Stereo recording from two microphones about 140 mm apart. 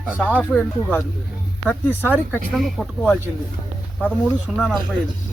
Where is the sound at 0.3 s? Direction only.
10° left (ahead or behind).